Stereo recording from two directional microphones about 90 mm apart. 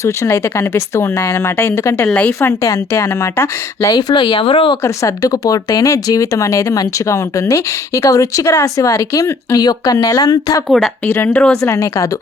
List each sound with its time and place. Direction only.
0.0 s speech: 35° left (ahead or behind)
2.1 s speech: 15° left (ahead or behind)
2.5 s speech: 35° left (ahead or behind)
3.9 s speech: 70° left (ahead or behind)
4.8 s speech: 40° left (ahead or behind)
10.7 s speech: centre (ahead or behind)
11.0 s speech: 25° left (ahead or behind)
11.3 s speech: 10° left (ahead or behind)
11.6 s speech: 35° left (ahead or behind)